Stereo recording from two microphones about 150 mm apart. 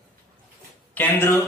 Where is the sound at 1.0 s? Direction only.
15° left (ahead or behind).